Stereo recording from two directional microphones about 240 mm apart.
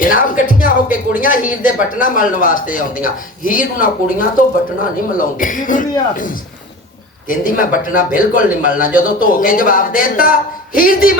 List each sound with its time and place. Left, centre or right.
0.0 s a man's voice: left
7.3 s a man's voice: left